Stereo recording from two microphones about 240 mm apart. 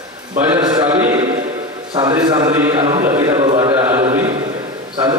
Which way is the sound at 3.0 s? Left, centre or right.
Centre.